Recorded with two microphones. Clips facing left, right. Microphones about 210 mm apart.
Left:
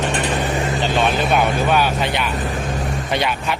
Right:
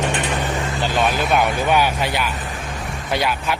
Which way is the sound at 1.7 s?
15° right (ahead or behind).